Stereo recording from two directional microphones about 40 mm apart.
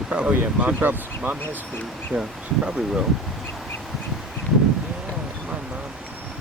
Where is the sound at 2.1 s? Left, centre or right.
Right.